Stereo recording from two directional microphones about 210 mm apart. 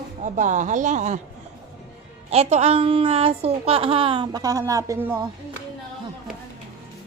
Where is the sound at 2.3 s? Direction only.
30° right (ahead or behind); by 5.2 s 10° right (ahead or behind).